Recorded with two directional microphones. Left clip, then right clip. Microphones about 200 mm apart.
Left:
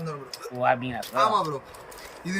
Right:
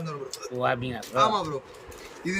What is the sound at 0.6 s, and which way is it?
Speech, 10° right (ahead or behind).